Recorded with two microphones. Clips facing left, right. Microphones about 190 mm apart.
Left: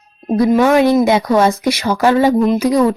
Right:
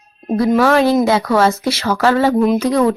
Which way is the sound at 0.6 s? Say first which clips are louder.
Left 1 dB; 15° left (ahead or behind).